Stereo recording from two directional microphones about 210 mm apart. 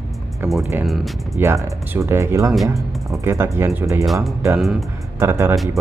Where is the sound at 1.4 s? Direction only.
10° right (ahead or behind).